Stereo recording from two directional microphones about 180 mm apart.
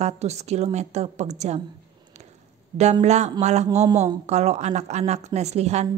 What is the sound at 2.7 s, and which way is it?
A woman's voice, 40° right (ahead or behind).